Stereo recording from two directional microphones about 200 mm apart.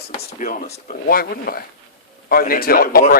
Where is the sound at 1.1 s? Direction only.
50° left (ahead or behind).